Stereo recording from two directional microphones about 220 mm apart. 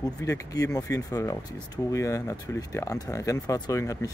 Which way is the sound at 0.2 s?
15° left (ahead or behind).